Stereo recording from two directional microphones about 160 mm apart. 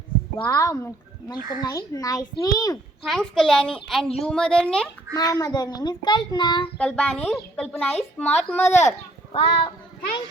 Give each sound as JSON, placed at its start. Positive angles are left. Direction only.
{"t": 0.4, "sound": "speech", "side_deg": 20}
{"t": 3.0, "sound": "a woman's voice", "side_deg": 0}
{"t": 5.1, "sound": "speech", "side_deg": 20}
{"t": 6.7, "sound": "a child's voice", "side_deg": 10}
{"t": 8.5, "sound": "speech", "side_deg": 45}
{"t": 9.3, "sound": "a child's voice", "side_deg": 35}